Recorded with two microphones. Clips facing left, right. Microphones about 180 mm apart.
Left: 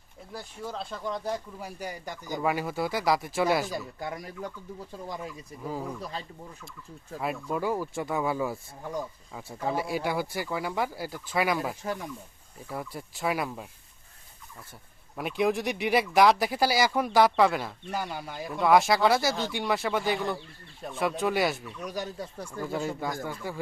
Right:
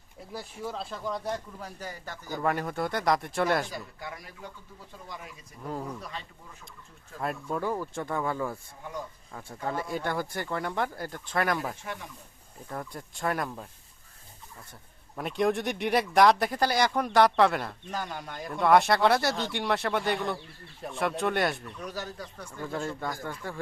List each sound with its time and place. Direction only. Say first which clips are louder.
0.3 s speech: right 1 dB; centre (ahead or behind)
1.5 s speech: left 3 dB; 10° left (ahead or behind)
2.5 s speech: even; 5° left (ahead or behind)
3.7 s speech: left 5 dB; 35° left (ahead or behind)
7.2 s speech: left 1 dB; 5° left (ahead or behind)
15.1 s speech: even; 5° left (ahead or behind)
22.6 s speech: left 2 dB; 5° left (ahead or behind)